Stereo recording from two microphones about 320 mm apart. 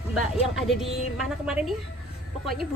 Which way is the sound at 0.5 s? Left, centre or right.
Centre.